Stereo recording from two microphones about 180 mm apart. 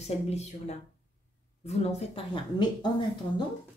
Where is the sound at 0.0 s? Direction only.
35° left (ahead or behind).